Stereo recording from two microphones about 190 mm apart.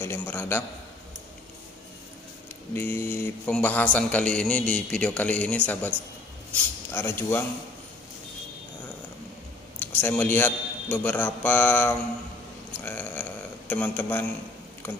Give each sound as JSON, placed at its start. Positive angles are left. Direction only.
{"t": 0.0, "sound": "speech", "side_deg": 15}
{"t": 2.7, "sound": "speech", "side_deg": 10}
{"t": 9.8, "sound": "speech", "side_deg": 10}
{"t": 12.7, "sound": "a sound", "side_deg": 10}